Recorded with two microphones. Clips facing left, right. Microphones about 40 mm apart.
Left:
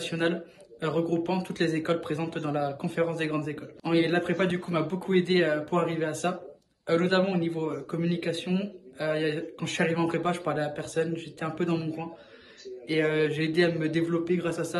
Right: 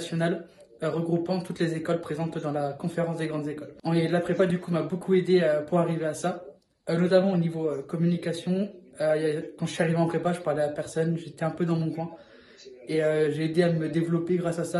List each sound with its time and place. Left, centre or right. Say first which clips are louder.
0.0 s a man's voice: even; left